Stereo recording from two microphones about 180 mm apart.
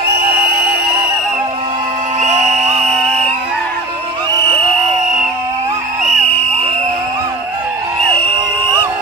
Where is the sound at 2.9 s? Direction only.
5° left (ahead or behind).